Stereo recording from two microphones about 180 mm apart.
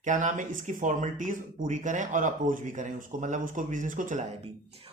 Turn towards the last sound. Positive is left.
turn(degrees=-45)  # may be behind; listen again after turning